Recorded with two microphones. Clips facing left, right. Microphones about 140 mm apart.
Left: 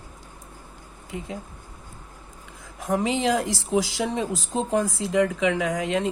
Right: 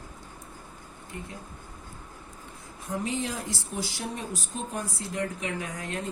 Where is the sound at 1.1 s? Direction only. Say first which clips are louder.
Left 6 dB; 90° left.